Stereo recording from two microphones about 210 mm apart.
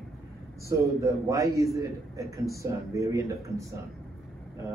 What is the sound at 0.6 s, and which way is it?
Speech, 15° right (ahead or behind).